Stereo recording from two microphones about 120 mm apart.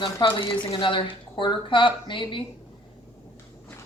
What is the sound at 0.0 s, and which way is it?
Speech, 45° left (ahead or behind).